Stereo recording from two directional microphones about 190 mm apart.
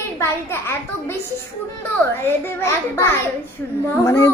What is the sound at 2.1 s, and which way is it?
A child's voice, 10° left (ahead or behind).